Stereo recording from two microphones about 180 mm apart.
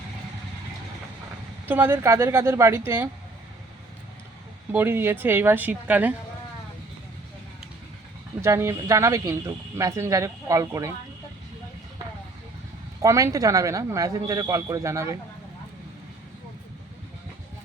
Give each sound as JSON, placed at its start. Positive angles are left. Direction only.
{"t": 1.6, "sound": "speech", "side_deg": -10}
{"t": 4.7, "sound": "speech", "side_deg": -10}
{"t": 8.4, "sound": "speech", "side_deg": -15}
{"t": 13.0, "sound": "speech", "side_deg": -15}